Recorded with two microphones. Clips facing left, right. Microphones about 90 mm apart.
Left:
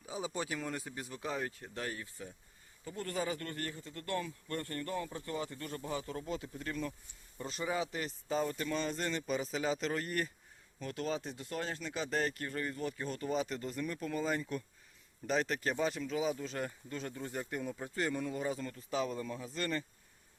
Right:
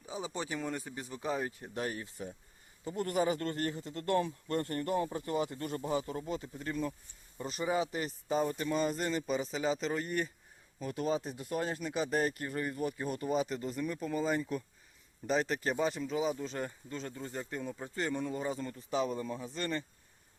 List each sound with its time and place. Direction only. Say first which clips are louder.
0.0 s speech: even; 5° left (ahead or behind)
1.5 s speech: right 4 dB; 20° right (ahead or behind)
6.2 s speech: right 2 dB; 5° right (ahead or behind)